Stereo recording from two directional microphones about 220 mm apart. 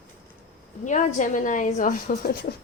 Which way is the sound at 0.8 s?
35° left (ahead or behind).